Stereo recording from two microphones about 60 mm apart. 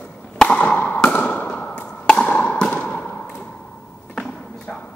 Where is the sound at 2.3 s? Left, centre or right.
Left.